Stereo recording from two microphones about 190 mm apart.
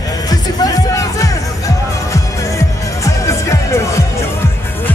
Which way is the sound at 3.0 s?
15° left (ahead or behind).